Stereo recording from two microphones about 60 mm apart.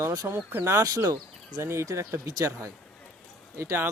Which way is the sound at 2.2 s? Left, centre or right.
Right.